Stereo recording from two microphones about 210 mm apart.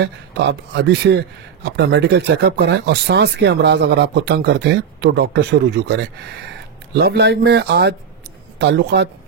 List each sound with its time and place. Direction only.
0.0 s a man's voice: 55° right (ahead or behind)